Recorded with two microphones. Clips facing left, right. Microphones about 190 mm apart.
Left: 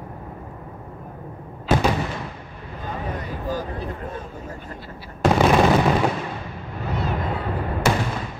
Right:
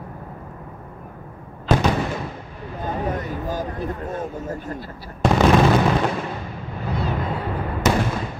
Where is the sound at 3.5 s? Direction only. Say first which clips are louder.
Left 1 dB; 45° right (ahead or behind).